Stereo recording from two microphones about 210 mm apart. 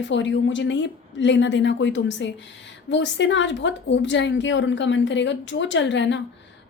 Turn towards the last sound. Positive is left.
turn(degrees=60)  # may be behind; listen again after turning